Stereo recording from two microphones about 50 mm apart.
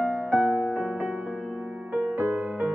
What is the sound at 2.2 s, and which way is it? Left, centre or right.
Music, right.